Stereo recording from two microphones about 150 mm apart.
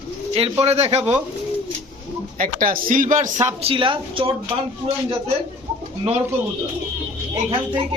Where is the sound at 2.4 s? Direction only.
65° right (ahead or behind).